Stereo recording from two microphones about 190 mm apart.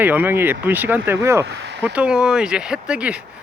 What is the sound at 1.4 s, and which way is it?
Speech, 65° right (ahead or behind).